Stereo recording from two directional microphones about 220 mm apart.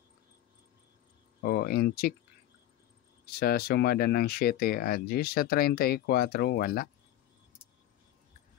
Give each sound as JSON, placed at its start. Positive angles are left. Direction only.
{"t": 1.4, "sound": "speech", "side_deg": 45}
{"t": 3.3, "sound": "speech", "side_deg": 45}